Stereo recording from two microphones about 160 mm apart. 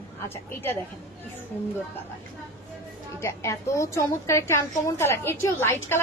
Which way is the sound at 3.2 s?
15° left (ahead or behind).